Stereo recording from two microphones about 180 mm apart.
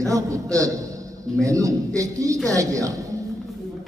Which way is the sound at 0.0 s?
20° right (ahead or behind).